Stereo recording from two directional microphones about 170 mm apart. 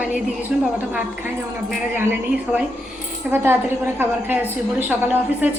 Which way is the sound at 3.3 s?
5° right (ahead or behind).